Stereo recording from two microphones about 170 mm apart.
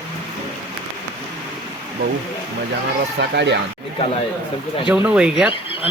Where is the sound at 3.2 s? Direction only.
80° right.